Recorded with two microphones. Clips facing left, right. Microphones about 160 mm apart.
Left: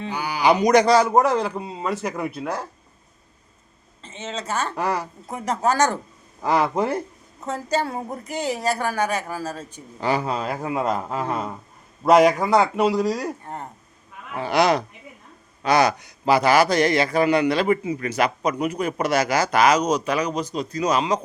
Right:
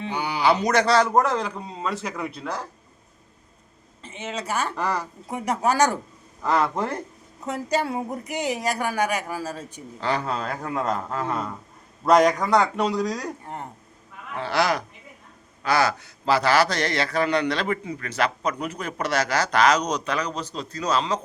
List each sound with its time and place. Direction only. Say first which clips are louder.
0.1 s a sound: right 1 dB; 20° right (ahead or behind)
0.4 s a man's voice: left 5 dB; 15° left (ahead or behind)
4.0 s a woman's voice: even; 15° right (ahead or behind)
4.8 s a man's voice: left 4 dB; 5° left (ahead or behind)
5.3 s a woman's voice: left 1 dB; 10° right (ahead or behind)
6.4 s speech: left 2 dB; 5° left (ahead or behind)
7.4 s a woman's voice: left 1 dB; 15° right (ahead or behind)
10.0 s a man's voice: left 3 dB; 10° left (ahead or behind)
14.3 s a man's voice: left 4 dB; 15° left (ahead or behind)